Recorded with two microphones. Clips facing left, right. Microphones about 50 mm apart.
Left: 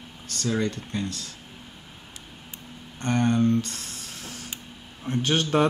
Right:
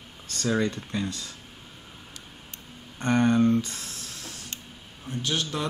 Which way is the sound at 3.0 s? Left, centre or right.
Centre.